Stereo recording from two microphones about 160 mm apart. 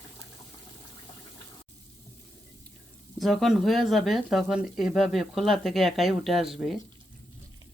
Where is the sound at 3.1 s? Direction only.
Centre (ahead or behind).